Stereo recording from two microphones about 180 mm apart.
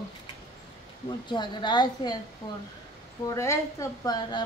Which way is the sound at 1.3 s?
25° left (ahead or behind).